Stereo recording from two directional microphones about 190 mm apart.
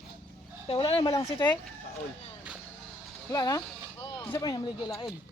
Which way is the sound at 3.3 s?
20° left (ahead or behind).